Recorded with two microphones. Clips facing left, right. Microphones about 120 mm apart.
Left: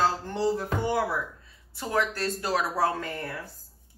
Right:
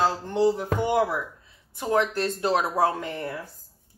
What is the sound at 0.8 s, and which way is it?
Speech, 20° right (ahead or behind).